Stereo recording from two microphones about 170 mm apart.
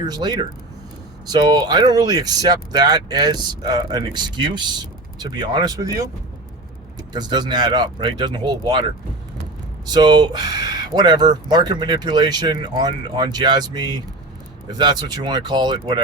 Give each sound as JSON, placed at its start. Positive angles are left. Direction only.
{"t": 0.0, "sound": "speech", "side_deg": -25}
{"t": 7.1, "sound": "speech", "side_deg": -25}
{"t": 9.9, "sound": "speech", "side_deg": -25}